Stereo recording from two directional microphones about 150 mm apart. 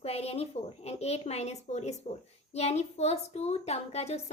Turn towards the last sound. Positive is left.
turn(degrees=45)  # may be behind; listen again after turning